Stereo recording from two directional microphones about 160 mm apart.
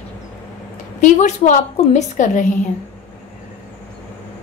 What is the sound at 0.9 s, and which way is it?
A woman's voice, 50° left (ahead or behind).